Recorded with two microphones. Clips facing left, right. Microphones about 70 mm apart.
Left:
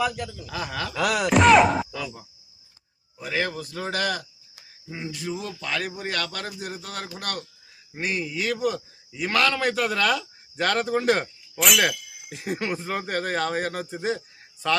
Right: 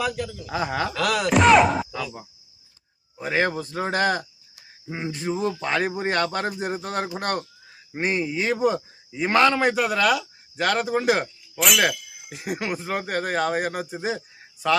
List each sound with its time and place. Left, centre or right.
0.0 s a man's voice: centre
0.4 s a man's voice: right
0.9 s speech: centre
3.2 s a man's voice: right; by 14.8 s centre